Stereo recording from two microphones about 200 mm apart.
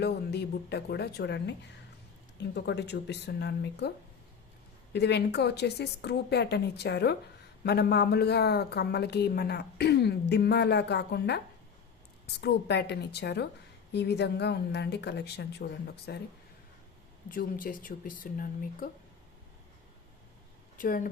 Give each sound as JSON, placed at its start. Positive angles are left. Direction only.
{"t": 0.0, "sound": "speech", "side_deg": 55}
{"t": 4.9, "sound": "speech", "side_deg": 55}
{"t": 17.2, "sound": "speech", "side_deg": 45}
{"t": 20.7, "sound": "speech", "side_deg": 45}